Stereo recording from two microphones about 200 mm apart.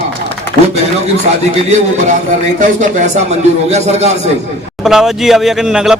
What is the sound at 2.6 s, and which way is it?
Speech, 35° right (ahead or behind).